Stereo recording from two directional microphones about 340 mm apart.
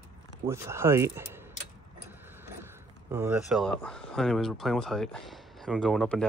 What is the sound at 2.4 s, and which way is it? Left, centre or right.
Speech, centre.